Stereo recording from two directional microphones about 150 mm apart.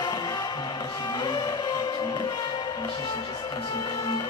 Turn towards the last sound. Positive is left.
turn(degrees=25)  # may be behind; listen again after turning